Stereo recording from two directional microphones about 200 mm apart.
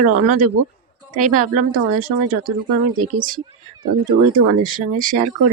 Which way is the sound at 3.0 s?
45° right (ahead or behind).